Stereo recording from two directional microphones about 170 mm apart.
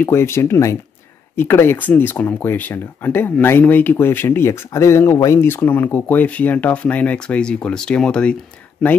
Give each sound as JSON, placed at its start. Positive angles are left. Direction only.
{"t": 0.0, "sound": "speech", "side_deg": 15}